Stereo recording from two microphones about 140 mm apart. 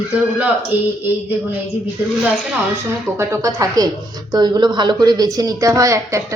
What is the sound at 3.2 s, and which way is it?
Speech, 25° right (ahead or behind).